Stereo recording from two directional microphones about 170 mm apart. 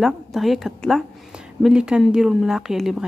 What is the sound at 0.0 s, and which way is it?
A woman's voice, centre (ahead or behind).